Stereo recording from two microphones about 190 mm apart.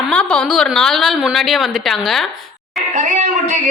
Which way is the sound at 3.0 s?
40° right (ahead or behind).